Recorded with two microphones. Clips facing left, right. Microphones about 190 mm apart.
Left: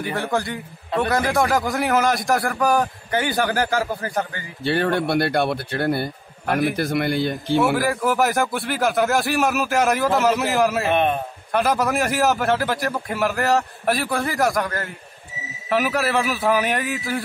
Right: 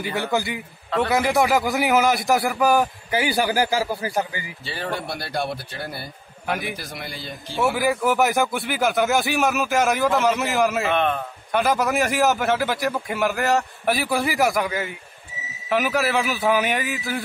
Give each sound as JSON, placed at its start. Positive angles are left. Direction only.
{"t": 0.2, "sound": "a man's voice", "side_deg": -5}
{"t": 4.6, "sound": "speech", "side_deg": 60}
{"t": 6.5, "sound": "a man's voice", "side_deg": 0}
{"t": 6.8, "sound": "speech", "side_deg": 60}
{"t": 7.7, "sound": "a man's voice", "side_deg": 0}
{"t": 11.0, "sound": "a man's voice", "side_deg": 15}
{"t": 11.5, "sound": "a man's voice", "side_deg": 0}